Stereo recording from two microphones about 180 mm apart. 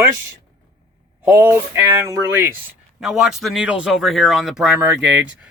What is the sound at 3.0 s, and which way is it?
Speech, centre (ahead or behind).